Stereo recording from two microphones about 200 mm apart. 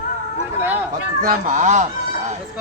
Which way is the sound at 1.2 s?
40° right (ahead or behind).